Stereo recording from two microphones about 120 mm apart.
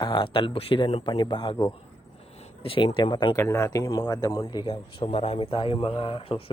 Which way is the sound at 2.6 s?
50° left (ahead or behind).